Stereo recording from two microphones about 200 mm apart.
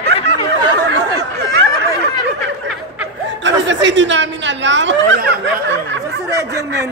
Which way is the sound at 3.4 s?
65° right (ahead or behind).